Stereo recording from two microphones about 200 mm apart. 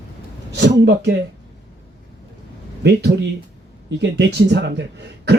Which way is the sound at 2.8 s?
55° right (ahead or behind).